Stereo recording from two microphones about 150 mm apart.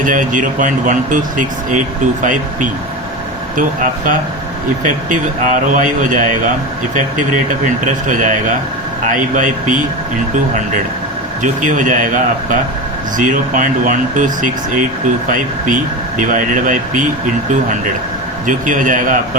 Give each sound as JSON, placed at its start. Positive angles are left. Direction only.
{"t": 0.0, "sound": "speech", "side_deg": -60}
{"t": 11.6, "sound": "speech", "side_deg": -60}
{"t": 18.4, "sound": "speech", "side_deg": -60}